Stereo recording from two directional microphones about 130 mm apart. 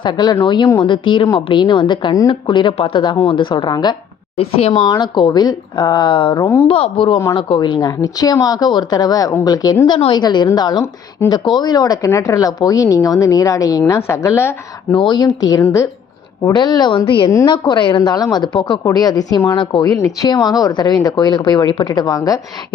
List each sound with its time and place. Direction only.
0.0 s speech: 35° left (ahead or behind)
4.4 s speech: 50° left (ahead or behind)
4.9 s speech: 35° left (ahead or behind)
11.2 s speech: 20° left (ahead or behind)
11.5 s speech: 30° left (ahead or behind)
14.9 s speech: 35° left (ahead or behind)
16.5 s speech: 35° left (ahead or behind)